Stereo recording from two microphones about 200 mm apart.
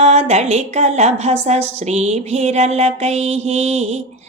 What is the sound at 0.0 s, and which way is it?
Mantra, 35° right (ahead or behind).